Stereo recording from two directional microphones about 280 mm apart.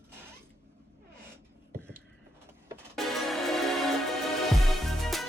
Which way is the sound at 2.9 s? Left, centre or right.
Centre.